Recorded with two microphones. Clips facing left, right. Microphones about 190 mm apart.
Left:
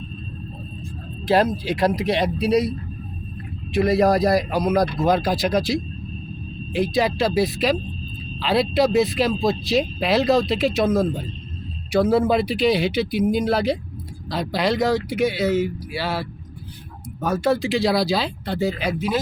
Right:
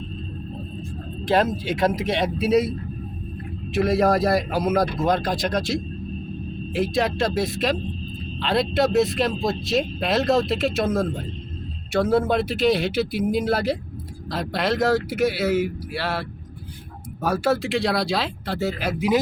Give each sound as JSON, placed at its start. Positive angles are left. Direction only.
{"t": 1.2, "sound": "speech", "side_deg": 0}
{"t": 3.8, "sound": "speech", "side_deg": 0}
{"t": 18.9, "sound": "speech", "side_deg": -15}